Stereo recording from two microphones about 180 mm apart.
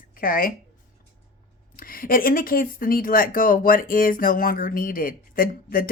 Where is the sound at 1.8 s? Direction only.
55° left (ahead or behind).